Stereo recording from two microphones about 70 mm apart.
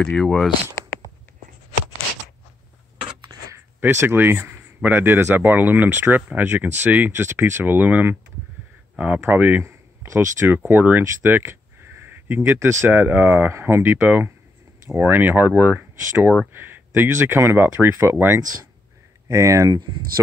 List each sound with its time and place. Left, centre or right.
0.0 s speech: centre
3.3 s a sound: right
3.8 s speech: right
7.2 s speech: right
9.7 s a sound: right
10.5 s speech: right
19.2 s speech: right